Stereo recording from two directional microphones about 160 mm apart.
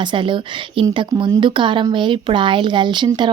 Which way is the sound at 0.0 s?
30° right (ahead or behind).